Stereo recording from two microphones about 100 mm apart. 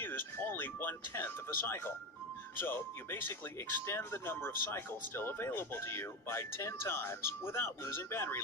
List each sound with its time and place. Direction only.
0.0 s speech: 20° left (ahead or behind)